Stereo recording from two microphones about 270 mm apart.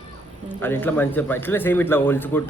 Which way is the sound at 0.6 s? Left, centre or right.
Centre.